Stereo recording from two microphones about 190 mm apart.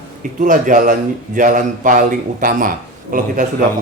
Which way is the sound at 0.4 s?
45° right (ahead or behind).